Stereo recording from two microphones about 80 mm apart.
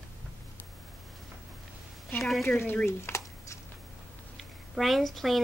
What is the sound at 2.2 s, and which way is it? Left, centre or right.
Speech, centre.